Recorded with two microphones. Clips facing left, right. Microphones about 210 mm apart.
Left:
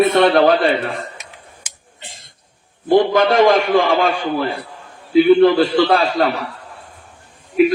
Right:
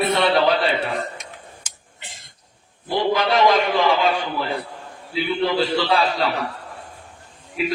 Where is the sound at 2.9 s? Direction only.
50° left (ahead or behind).